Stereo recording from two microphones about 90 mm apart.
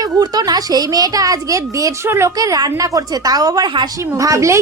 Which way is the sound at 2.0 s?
30° right (ahead or behind).